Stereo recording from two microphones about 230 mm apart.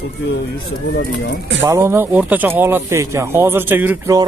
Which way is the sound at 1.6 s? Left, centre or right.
Centre.